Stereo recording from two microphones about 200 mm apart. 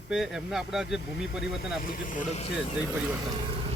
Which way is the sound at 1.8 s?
45° left (ahead or behind).